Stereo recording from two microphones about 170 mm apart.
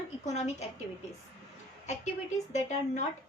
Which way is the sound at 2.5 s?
45° left (ahead or behind).